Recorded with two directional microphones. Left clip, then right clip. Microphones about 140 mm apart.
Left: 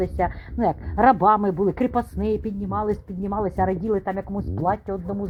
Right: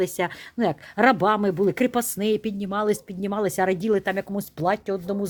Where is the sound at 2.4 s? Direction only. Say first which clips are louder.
Right 1 dB; 65° right (ahead or behind).